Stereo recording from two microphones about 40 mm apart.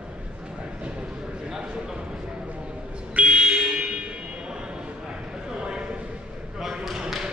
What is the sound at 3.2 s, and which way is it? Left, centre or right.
Vehicle, right.